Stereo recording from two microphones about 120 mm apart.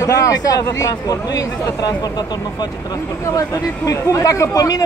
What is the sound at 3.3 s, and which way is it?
A man's voice, 25° left (ahead or behind).